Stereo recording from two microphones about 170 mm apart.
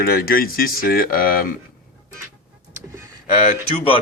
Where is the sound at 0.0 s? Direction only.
60° left (ahead or behind).